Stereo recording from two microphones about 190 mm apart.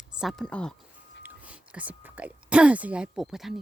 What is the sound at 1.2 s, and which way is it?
Speech, 10° right (ahead or behind).